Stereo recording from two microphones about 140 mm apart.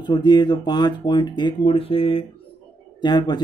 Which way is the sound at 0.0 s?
30° left (ahead or behind).